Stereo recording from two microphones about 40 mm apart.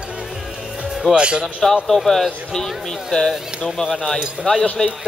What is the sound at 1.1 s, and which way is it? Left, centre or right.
Speech, right.